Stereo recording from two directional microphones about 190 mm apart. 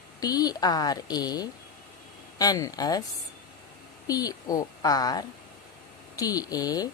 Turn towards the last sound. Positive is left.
turn(degrees=20)  # may be behind; listen again after turning